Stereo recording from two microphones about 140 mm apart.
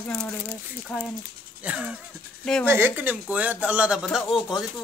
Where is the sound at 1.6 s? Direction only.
10° right (ahead or behind).